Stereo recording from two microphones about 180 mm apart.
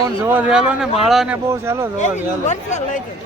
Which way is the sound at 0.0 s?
15° right (ahead or behind).